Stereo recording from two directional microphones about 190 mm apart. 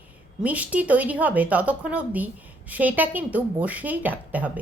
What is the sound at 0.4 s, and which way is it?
A woman's voice, 10° right (ahead or behind).